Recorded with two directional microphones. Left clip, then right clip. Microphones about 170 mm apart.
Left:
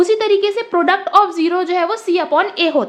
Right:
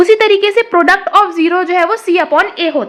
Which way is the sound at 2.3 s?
Centre (ahead or behind).